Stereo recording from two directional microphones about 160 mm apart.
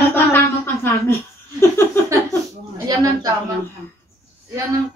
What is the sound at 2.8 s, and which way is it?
Speech, 25° right (ahead or behind).